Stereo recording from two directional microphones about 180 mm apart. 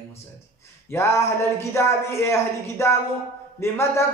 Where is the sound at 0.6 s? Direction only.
15° left (ahead or behind).